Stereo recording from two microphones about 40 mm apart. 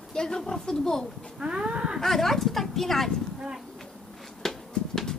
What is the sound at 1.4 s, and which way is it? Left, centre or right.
Livestock, right.